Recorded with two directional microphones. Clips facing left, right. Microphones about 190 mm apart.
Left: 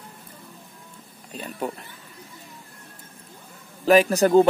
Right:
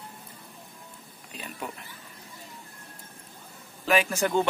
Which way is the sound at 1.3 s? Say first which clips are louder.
Left 8 dB; 40° left (ahead or behind).